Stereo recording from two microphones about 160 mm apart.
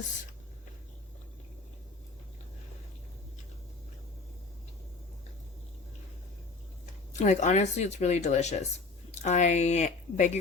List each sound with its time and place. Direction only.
7.2 s speech: 50° left (ahead or behind)